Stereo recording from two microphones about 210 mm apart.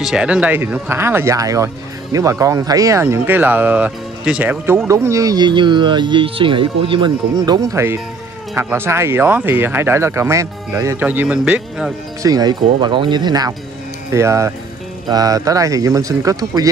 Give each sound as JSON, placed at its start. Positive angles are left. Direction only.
{"t": 0.0, "sound": "speech", "side_deg": -5}
{"t": 12.2, "sound": "speech", "side_deg": -20}